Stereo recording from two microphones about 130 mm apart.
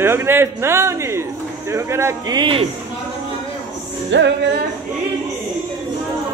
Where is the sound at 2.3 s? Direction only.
40° right (ahead or behind).